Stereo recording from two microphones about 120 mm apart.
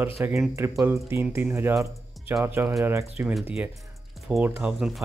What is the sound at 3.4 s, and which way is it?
Speech, 10° right (ahead or behind).